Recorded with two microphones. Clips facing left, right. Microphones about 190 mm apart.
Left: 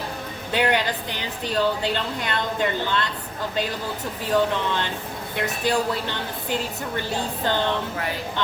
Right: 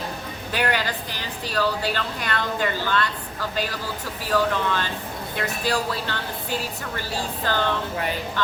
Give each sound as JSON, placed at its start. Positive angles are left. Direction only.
{"t": 0.5, "sound": "a woman's voice", "side_deg": 20}